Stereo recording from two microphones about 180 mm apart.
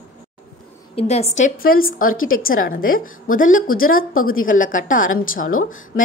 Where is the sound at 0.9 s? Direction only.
35° left (ahead or behind).